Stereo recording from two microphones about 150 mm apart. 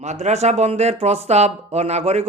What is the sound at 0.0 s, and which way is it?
Speech, 50° right (ahead or behind).